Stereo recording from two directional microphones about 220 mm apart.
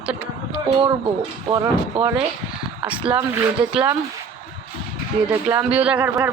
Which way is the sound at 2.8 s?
5° right (ahead or behind).